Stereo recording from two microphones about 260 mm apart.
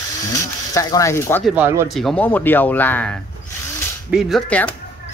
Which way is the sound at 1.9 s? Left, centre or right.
Centre.